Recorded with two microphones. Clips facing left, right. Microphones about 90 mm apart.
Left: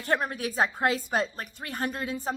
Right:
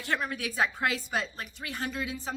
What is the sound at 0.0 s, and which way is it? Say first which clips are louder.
A woman's voice: left 4 dB; 40° left (ahead or behind).